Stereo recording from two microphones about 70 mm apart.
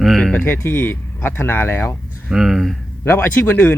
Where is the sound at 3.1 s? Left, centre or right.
Left.